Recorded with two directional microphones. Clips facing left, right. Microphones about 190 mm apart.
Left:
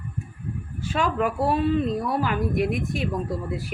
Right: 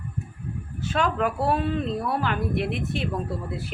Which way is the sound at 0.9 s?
10° left (ahead or behind).